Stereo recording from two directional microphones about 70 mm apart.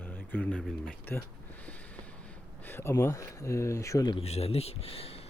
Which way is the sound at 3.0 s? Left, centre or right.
Left.